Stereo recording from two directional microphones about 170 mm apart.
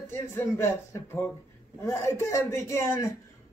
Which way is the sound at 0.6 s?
15° left (ahead or behind).